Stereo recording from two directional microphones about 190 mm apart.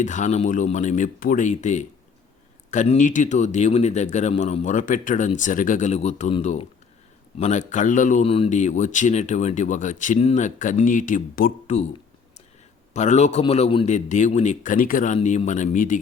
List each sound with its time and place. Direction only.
0.0 s speech: 40° left (ahead or behind)
12.9 s speech: 40° left (ahead or behind)